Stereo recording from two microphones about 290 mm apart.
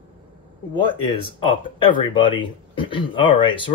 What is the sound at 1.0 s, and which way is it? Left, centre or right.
Speech, centre.